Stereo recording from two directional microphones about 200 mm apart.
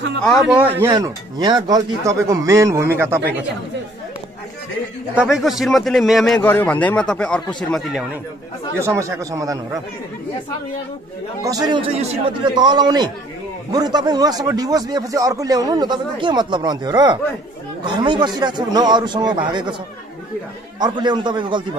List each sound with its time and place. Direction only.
0.2 s a man's voice: centre (ahead or behind)
0.8 s speech: 20° right (ahead or behind)
5.1 s a man's voice: 5° right (ahead or behind)
8.7 s speech: 15° right (ahead or behind)
11.4 s speech: 20° right (ahead or behind)
20.8 s speech: 20° right (ahead or behind)